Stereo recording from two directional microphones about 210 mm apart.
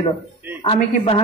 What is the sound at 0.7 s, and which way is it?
Speech, 30° left (ahead or behind).